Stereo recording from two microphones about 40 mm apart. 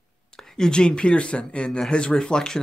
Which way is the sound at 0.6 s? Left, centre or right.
Left.